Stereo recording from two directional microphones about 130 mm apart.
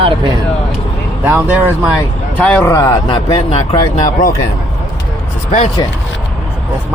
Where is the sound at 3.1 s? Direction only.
45° left (ahead or behind).